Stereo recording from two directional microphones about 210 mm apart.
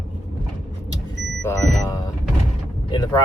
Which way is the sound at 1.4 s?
15° left (ahead or behind).